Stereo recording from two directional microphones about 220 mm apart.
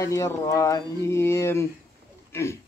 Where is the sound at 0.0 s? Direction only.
15° left (ahead or behind).